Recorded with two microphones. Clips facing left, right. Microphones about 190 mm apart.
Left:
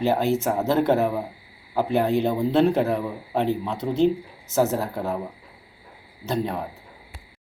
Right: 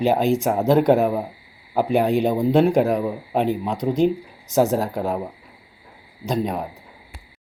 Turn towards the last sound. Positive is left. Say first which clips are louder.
# right 2 dB
turn(degrees=-15)  # may be behind; listen again after turning